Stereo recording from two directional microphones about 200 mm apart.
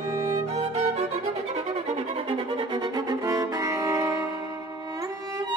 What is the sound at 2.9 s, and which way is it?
Music, 15° right (ahead or behind).